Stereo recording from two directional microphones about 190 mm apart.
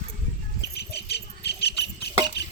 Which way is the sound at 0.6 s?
60° left (ahead or behind).